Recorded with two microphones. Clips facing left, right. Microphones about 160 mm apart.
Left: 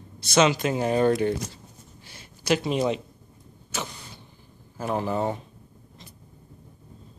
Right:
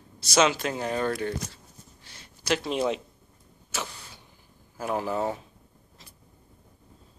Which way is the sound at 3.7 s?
5° right (ahead or behind).